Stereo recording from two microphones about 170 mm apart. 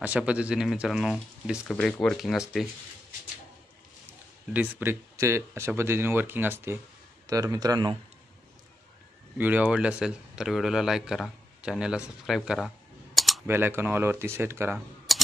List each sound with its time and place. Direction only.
0.0 s speech: 5° right (ahead or behind)
4.6 s speech: 10° right (ahead or behind)
9.4 s speech: 10° right (ahead or behind)
12.3 s camera: centre (ahead or behind)
13.5 s speech: 15° right (ahead or behind)
15.1 s typewriter: centre (ahead or behind)